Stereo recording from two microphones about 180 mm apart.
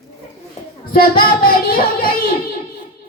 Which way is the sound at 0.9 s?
55° left (ahead or behind).